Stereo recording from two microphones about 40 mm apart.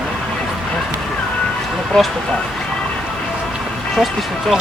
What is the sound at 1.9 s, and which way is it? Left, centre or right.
Speech, centre.